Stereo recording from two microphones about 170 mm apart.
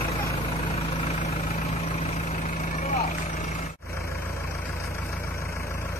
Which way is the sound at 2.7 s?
45° left (ahead or behind).